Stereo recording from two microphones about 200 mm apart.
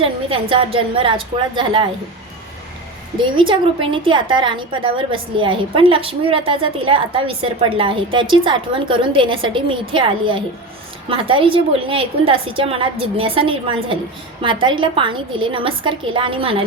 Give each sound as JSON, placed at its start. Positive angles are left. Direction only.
{"t": 0.0, "sound": "a woman's voice", "side_deg": -25}
{"t": 3.3, "sound": "a woman's voice", "side_deg": -25}